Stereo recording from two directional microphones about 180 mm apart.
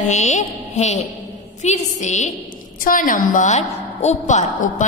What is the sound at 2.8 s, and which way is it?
Music, 50° left (ahead or behind).